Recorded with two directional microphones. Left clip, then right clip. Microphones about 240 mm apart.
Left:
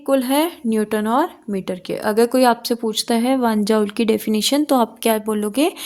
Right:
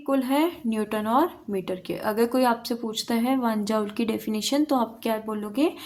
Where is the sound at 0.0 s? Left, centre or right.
Left.